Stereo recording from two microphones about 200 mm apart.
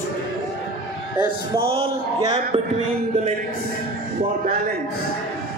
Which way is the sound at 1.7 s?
30° right (ahead or behind).